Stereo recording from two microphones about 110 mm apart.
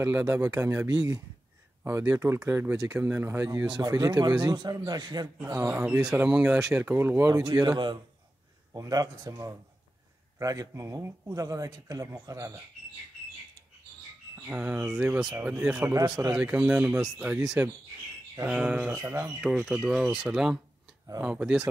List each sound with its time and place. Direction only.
0.0 s speech: 15° right (ahead or behind)
3.7 s speech: 40° right (ahead or behind)
5.7 s speech: 15° right (ahead or behind)
7.4 s speech: 40° right (ahead or behind)
14.5 s speech: 10° right (ahead or behind)
15.9 s speech: 30° right (ahead or behind)
16.3 s speech: 10° right (ahead or behind)
18.9 s speech: 30° right (ahead or behind)
19.4 s speech: 5° right (ahead or behind)